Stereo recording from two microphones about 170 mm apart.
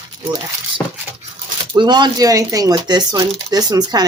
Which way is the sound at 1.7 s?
25° right (ahead or behind).